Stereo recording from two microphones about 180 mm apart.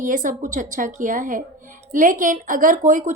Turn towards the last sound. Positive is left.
turn(degrees=-45)  # may be behind; listen again after turning